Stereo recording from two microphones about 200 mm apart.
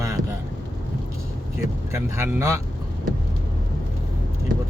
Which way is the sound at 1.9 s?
15° right (ahead or behind).